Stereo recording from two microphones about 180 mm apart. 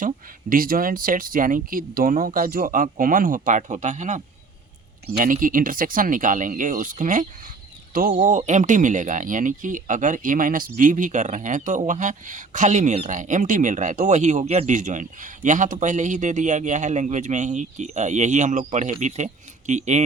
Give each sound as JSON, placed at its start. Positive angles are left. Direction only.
{"t": 0.5, "sound": "speech", "side_deg": -50}